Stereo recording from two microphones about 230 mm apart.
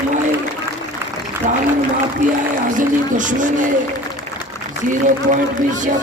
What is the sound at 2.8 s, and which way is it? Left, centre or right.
Speech, right.